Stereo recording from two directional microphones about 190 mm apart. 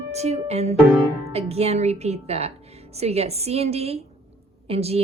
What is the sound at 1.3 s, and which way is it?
A woman's voice, 30° right (ahead or behind).